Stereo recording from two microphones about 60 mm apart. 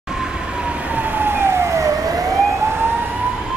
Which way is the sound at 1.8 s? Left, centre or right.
Right.